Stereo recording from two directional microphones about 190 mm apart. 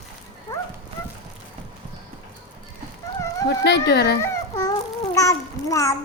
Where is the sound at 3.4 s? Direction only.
60° left (ahead or behind).